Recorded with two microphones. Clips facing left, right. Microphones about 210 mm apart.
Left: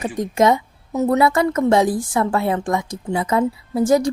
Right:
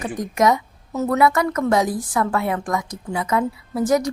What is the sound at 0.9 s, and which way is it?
Speech, 15° left (ahead or behind).